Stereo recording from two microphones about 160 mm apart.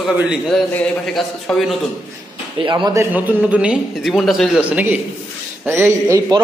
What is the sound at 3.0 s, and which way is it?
A man's voice, 10° right (ahead or behind).